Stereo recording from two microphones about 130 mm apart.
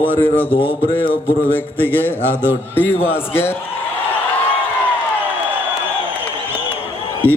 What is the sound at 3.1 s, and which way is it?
Speech, 15° left (ahead or behind).